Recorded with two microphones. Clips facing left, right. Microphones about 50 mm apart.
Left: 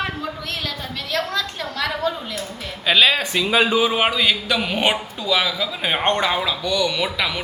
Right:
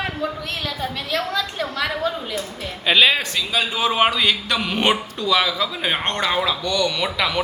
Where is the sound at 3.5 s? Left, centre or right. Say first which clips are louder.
Left 6 dB; left.